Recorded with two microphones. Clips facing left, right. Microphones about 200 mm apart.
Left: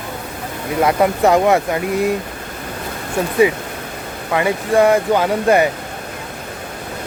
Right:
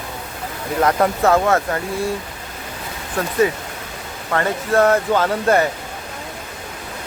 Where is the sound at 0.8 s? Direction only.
15° left (ahead or behind).